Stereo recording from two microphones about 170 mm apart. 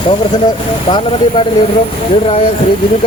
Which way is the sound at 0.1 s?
25° left (ahead or behind).